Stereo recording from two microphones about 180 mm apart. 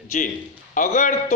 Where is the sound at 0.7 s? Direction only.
45° left (ahead or behind).